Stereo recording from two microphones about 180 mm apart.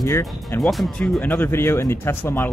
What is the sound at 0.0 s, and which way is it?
Speech, 20° left (ahead or behind).